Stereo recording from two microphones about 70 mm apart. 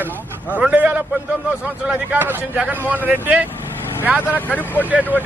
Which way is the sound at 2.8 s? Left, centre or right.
Right.